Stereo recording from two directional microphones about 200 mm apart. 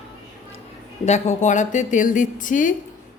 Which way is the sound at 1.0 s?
35° left (ahead or behind).